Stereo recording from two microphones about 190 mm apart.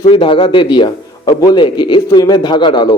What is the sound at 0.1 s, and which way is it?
A man's voice, 25° left (ahead or behind).